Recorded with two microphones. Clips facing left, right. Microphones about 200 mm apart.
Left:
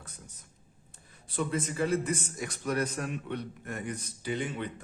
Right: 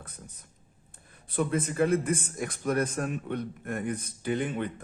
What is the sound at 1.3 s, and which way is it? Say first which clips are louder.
A man's voice: right 3 dB; 55° right (ahead or behind).